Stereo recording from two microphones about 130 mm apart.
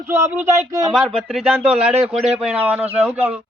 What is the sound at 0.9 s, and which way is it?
Speech, centre (ahead or behind).